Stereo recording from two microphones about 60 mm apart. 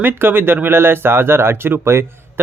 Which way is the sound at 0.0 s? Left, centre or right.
Right.